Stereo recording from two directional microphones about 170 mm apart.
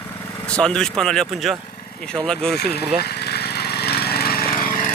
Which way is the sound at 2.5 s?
70° left (ahead or behind).